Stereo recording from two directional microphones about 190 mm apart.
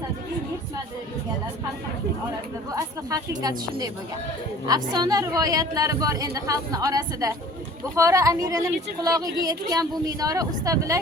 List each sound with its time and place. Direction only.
2.7 s a woman's voice: 20° right (ahead or behind)